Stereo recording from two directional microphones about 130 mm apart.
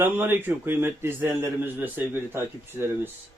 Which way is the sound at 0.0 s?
15° right (ahead or behind).